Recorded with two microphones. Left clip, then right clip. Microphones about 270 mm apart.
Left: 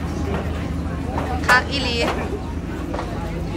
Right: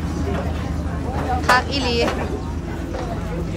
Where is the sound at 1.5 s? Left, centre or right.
Centre.